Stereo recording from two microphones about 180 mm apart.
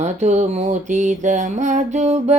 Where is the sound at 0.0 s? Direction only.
40° right (ahead or behind).